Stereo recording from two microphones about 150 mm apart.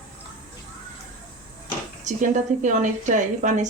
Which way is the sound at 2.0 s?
55° right (ahead or behind).